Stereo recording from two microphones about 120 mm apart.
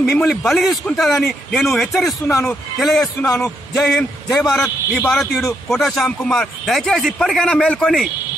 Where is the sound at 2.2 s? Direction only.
25° left (ahead or behind).